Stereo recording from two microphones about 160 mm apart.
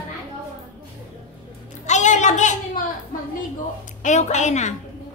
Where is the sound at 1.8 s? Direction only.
50° left (ahead or behind).